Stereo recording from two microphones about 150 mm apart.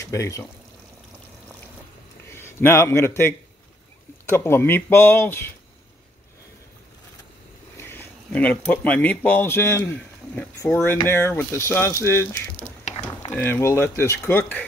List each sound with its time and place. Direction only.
0.0 s speech: 20° left (ahead or behind)
2.2 s speech: 15° left (ahead or behind)
7.7 s speech: 15° left (ahead or behind)